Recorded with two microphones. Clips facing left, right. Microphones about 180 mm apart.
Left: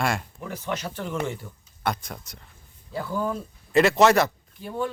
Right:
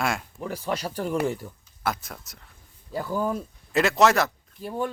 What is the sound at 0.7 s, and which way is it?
Speech, 35° right (ahead or behind).